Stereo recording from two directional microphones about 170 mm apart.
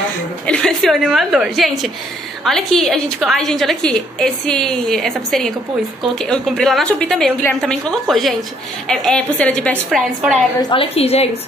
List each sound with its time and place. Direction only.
0.5 s a woman's voice: 5° left (ahead or behind)
10.6 s a woman's voice: 30° left (ahead or behind)